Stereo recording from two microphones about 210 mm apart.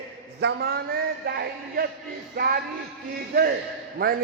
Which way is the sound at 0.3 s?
50° right (ahead or behind).